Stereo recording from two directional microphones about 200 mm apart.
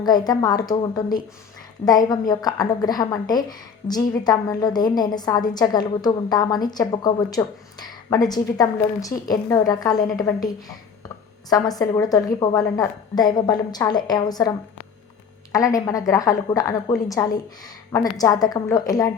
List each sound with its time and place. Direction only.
0.0 s a woman's voice: 20° left (ahead or behind)
15.5 s a woman's voice: 15° left (ahead or behind)